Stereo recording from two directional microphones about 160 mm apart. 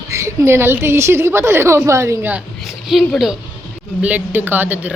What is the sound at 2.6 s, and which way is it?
A woman's voice, centre (ahead or behind).